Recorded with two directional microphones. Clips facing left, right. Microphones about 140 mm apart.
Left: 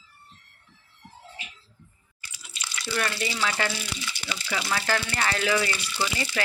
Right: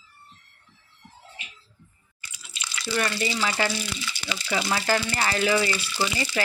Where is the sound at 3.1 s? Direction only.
5° right (ahead or behind).